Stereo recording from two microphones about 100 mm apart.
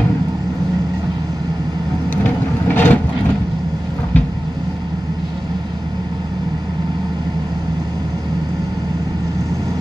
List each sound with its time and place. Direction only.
2.2 s vehicle: 20° left (ahead or behind)